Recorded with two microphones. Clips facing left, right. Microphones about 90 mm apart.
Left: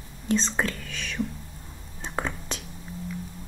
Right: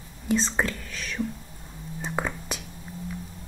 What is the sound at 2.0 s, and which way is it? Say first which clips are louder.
Whispering: right 1 dB; 5° right (ahead or behind).